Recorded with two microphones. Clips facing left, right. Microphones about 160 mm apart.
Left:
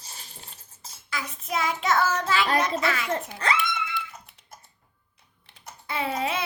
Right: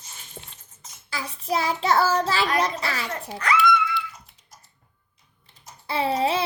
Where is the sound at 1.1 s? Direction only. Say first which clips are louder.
Right 4 dB; 30° right (ahead or behind).